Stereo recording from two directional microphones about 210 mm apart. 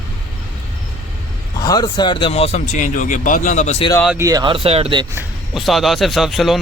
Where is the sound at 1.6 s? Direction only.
20° left (ahead or behind).